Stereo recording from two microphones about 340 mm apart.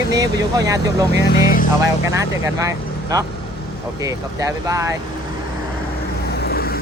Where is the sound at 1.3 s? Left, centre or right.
Left.